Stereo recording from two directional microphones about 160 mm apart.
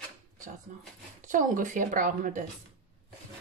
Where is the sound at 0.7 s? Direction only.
50° right (ahead or behind).